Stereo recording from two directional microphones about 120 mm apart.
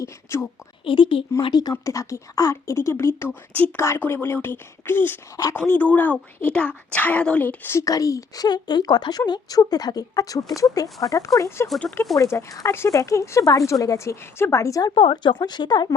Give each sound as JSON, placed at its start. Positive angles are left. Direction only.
{"t": 0.0, "sound": "a woman's voice", "side_deg": 25}
{"t": 0.9, "sound": "speech", "side_deg": 45}
{"t": 1.7, "sound": "a woman's voice", "side_deg": 25}
{"t": 14.9, "sound": "speech", "side_deg": 45}